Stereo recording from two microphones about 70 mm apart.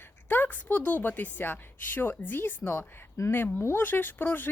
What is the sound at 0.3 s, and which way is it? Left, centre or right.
A woman's voice, left.